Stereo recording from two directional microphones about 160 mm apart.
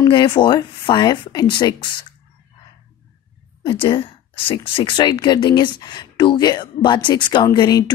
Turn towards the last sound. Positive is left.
turn(degrees=25)  # may be behind; listen again after turning